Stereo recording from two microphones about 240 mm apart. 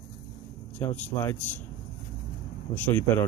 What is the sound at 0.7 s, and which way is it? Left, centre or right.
Speech, centre.